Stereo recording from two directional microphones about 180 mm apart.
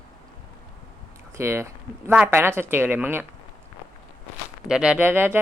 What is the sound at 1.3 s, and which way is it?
Speech, 15° right (ahead or behind).